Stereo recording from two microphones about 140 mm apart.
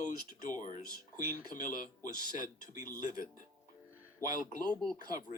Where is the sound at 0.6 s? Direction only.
65° left (ahead or behind).